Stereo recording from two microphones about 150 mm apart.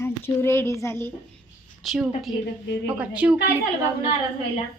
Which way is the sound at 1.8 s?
5° right (ahead or behind).